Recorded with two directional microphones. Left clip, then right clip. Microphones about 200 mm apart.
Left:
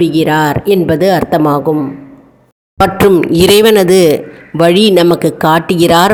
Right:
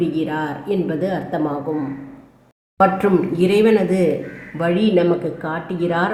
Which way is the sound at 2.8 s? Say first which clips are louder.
Left 7 dB; 50° left (ahead or behind).